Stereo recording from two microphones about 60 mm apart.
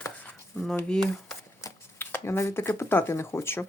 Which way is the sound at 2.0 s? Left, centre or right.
Left.